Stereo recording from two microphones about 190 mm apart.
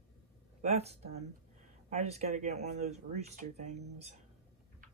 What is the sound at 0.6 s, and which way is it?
Speech, 35° right (ahead or behind).